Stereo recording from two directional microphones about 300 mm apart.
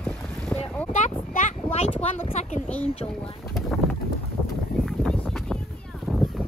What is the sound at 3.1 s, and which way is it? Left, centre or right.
Speech, centre.